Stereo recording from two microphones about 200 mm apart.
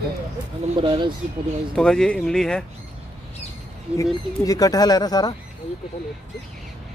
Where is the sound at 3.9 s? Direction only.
15° left (ahead or behind).